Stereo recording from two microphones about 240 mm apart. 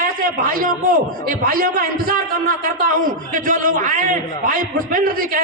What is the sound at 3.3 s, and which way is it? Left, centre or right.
A man's voice, right.